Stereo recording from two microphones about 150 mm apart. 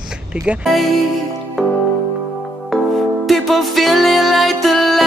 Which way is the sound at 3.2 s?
Centre (ahead or behind).